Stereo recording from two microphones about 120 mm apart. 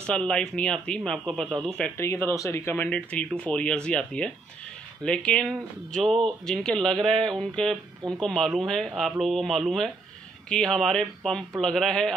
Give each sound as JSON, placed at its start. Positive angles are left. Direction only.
{"t": 0.0, "sound": "speech", "side_deg": 10}
{"t": 2.0, "sound": "speech", "side_deg": 20}